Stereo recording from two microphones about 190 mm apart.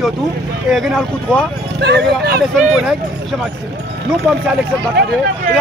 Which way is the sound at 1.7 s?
65° right (ahead or behind).